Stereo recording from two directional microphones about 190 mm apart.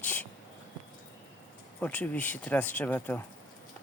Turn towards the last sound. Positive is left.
turn(degrees=10)  # may be behind; listen again after turning